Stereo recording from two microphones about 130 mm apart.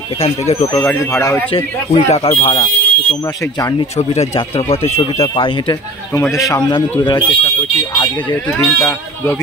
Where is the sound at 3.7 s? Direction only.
55° left (ahead or behind).